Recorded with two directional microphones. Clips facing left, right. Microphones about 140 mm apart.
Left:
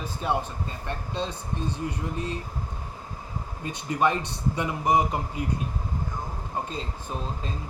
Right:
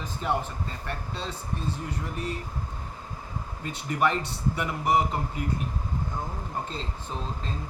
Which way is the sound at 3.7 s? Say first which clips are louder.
Left 1 dB; 20° left (ahead or behind).